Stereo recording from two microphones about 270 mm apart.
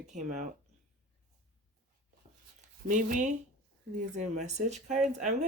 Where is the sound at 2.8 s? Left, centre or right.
Right.